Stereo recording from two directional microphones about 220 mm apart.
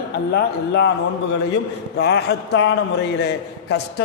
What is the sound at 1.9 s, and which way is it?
Speech, 50° left (ahead or behind).